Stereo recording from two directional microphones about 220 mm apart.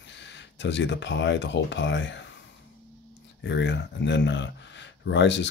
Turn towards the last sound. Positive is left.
turn(degrees=55)  # may be behind; listen again after turning